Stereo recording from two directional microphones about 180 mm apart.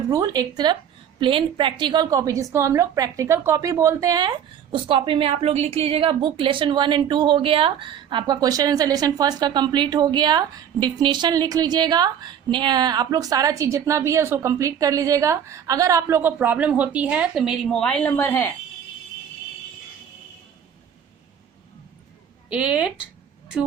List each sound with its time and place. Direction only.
0.1 s a woman's voice: 20° right (ahead or behind); by 18.5 s 10° left (ahead or behind)
22.4 s a woman's voice: 5° right (ahead or behind)